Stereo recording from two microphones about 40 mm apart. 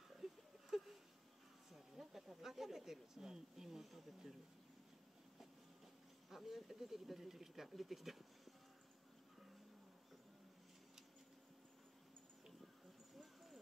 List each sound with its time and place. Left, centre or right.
0.2 s a sound: centre
1.7 s speech: centre
6.3 s speech: centre